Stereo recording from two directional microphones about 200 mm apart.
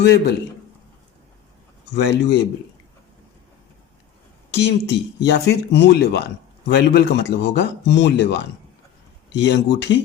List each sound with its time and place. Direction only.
0.0 s speech: 55° left (ahead or behind)
2.0 s speech: 60° left (ahead or behind)
4.5 s speech: 55° left (ahead or behind)
9.4 s speech: 60° left (ahead or behind)